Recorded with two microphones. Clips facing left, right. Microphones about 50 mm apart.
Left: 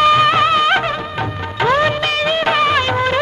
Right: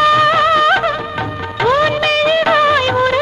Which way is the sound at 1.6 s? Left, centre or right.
Left.